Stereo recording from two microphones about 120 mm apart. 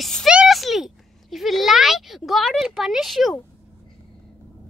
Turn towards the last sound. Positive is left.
turn(degrees=0)  # may be behind; listen again after turning